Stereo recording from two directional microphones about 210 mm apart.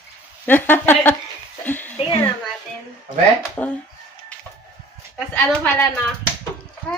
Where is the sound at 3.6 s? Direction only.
10° left (ahead or behind).